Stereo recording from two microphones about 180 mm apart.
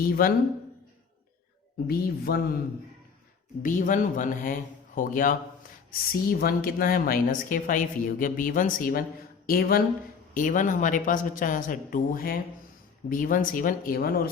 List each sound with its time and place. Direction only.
0.0 s speech: 55° left (ahead or behind)
1.9 s speech: 60° left (ahead or behind)
3.6 s speech: 45° left (ahead or behind)